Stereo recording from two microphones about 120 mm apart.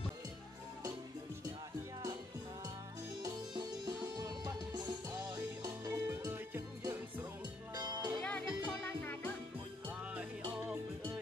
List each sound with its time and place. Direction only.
3.5 s music: 35° right (ahead or behind)
6.0 s music: 20° right (ahead or behind)
7.7 s music: 35° right (ahead or behind)
8.2 s music: 10° left (ahead or behind)
9.8 s music: 15° right (ahead or behind)